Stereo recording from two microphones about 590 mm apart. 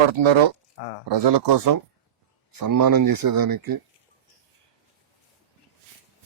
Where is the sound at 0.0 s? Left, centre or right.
Right.